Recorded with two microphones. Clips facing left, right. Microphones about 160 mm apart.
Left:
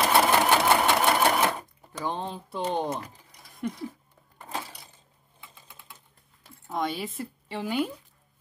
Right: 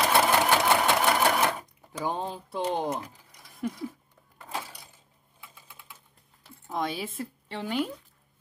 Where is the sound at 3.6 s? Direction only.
Centre (ahead or behind).